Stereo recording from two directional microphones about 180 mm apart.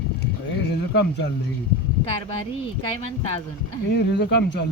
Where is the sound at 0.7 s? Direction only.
70° left (ahead or behind).